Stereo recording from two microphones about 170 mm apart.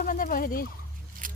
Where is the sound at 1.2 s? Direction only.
50° right (ahead or behind).